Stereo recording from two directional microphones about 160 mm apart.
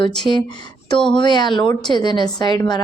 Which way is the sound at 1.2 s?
30° left (ahead or behind).